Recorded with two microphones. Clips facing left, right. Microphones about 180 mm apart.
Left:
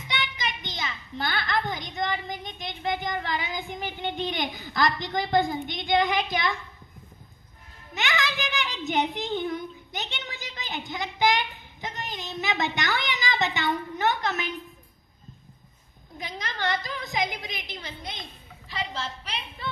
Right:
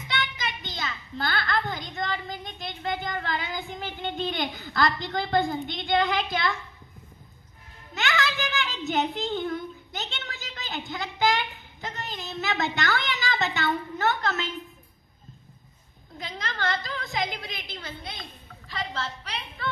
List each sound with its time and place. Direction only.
0.1 s a sound: 15° left (ahead or behind)
7.9 s a child's voice: 15° left (ahead or behind)
16.1 s a woman's voice: 15° left (ahead or behind)